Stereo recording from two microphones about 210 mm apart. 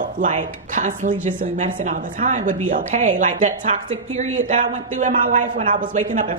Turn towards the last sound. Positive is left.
turn(degrees=-35)  # may be behind; listen again after turning